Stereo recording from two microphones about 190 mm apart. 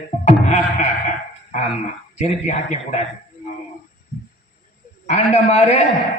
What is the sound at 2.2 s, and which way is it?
Speech, 35° left (ahead or behind).